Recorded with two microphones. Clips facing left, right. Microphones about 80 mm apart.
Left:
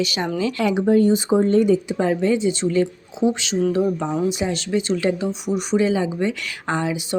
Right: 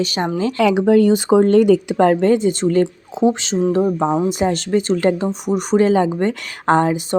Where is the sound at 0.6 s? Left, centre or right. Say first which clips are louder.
Right 4 dB; right.